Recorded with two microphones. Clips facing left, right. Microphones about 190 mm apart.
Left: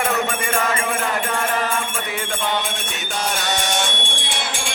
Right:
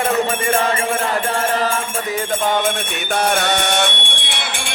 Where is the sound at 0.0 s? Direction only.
35° right (ahead or behind).